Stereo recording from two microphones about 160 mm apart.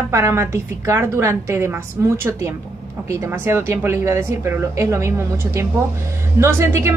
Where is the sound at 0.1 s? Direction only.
15° right (ahead or behind).